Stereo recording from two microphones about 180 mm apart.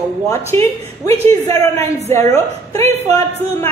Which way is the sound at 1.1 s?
35° right (ahead or behind).